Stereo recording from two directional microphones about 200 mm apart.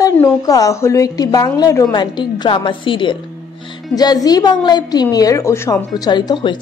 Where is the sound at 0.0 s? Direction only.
15° left (ahead or behind).